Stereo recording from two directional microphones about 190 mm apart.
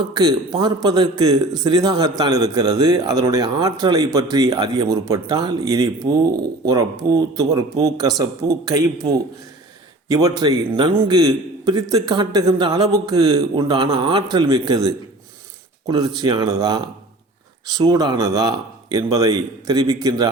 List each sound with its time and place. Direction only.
0.0 s a man's voice: 20° right (ahead or behind)